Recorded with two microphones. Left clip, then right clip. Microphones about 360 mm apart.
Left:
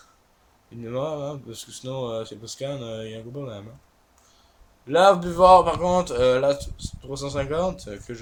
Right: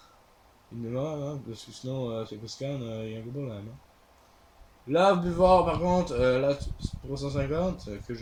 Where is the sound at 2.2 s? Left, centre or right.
Left.